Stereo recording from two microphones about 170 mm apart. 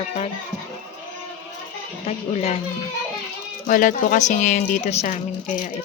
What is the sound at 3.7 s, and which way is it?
Speech, 50° left (ahead or behind).